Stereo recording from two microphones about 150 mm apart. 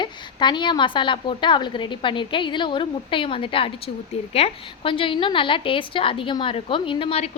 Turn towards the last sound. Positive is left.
turn(degrees=40)  # may be behind; listen again after turning